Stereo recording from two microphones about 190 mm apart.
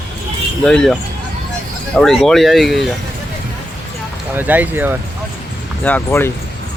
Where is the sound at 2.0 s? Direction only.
Centre (ahead or behind).